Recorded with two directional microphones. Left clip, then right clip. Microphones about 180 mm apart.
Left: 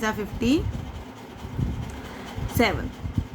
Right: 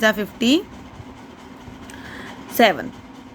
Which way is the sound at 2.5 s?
50° right (ahead or behind).